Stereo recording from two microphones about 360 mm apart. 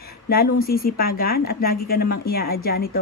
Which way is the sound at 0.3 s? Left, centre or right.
Left.